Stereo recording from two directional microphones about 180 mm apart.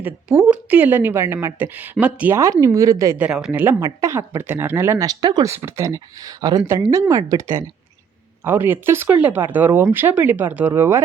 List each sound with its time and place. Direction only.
0.0 s a woman's voice: 5° right (ahead or behind)